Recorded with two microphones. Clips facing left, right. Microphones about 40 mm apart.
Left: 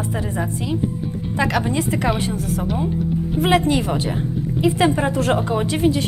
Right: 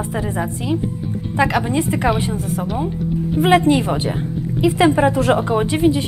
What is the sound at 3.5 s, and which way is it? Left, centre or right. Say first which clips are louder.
Speech: right 4 dB; right.